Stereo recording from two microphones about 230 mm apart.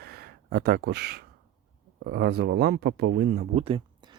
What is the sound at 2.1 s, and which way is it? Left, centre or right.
Speech, right.